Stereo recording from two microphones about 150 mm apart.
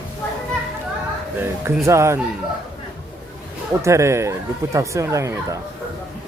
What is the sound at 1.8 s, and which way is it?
Speech, 20° right (ahead or behind).